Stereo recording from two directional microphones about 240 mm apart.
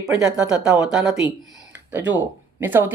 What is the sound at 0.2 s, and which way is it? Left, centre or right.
Speech, centre.